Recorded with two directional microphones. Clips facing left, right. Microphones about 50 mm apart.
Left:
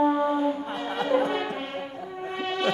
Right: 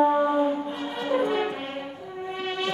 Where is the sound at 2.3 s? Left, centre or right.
Centre.